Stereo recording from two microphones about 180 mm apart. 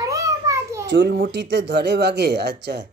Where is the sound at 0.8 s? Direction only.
70° right (ahead or behind).